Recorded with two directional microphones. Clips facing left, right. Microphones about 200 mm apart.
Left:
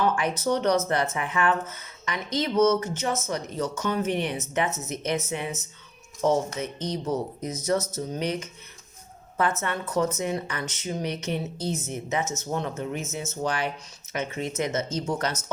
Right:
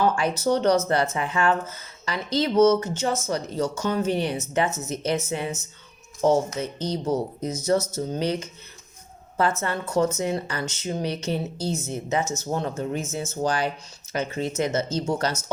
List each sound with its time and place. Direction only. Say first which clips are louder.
0.0 s a woman's voice: right 2 dB; 30° right (ahead or behind)